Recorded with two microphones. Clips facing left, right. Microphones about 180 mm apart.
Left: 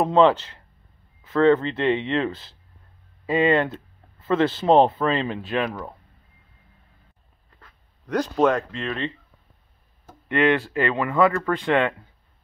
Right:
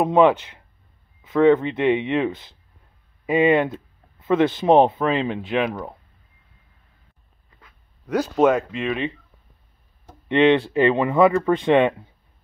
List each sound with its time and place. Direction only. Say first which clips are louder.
0.0 s speech: right 1 dB; 10° right (ahead or behind)
7.6 s speech: right 2 dB; 5° right (ahead or behind)